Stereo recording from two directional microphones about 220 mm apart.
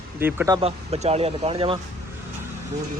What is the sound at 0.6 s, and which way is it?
Speech, 30° right (ahead or behind).